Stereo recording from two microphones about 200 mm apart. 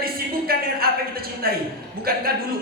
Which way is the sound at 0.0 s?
50° right (ahead or behind).